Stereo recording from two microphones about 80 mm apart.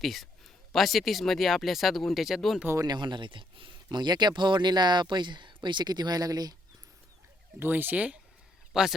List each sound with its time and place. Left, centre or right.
0.0 s speech: centre
2.8 s speech: right
5.6 s speech: right
7.6 s a man's voice: right; by 9.0 s centre